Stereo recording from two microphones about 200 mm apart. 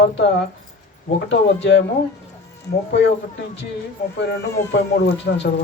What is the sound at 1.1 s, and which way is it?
Speech, 60° left (ahead or behind).